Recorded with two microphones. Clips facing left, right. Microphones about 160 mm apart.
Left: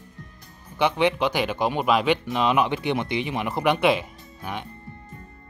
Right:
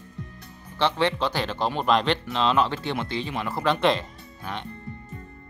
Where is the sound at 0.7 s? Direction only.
15° left (ahead or behind).